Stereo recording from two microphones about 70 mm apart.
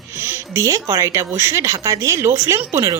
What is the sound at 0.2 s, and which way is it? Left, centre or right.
Speech, right.